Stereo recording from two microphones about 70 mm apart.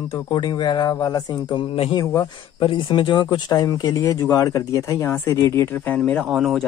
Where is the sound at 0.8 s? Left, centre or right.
Left.